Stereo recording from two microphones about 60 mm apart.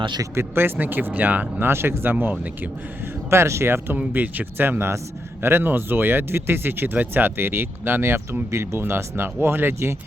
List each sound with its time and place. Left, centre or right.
0.3 s speech: right
1.6 s speech: right
2.1 s speech: right
3.2 s speech: right
3.9 s speech: right